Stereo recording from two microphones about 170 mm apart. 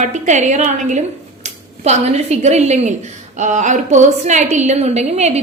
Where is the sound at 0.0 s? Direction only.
45° right (ahead or behind).